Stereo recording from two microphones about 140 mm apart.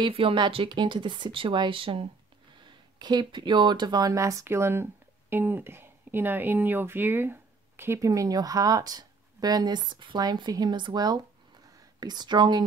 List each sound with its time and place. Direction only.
0.0 s speech: 40° right (ahead or behind)